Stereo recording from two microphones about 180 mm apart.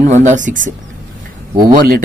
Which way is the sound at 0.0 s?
40° right (ahead or behind).